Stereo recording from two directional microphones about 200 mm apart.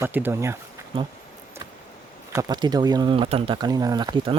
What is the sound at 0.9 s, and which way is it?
Speech, 25° right (ahead or behind).